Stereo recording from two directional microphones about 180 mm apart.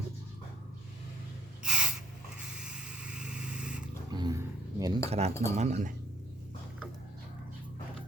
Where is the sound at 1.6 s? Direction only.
5° right (ahead or behind).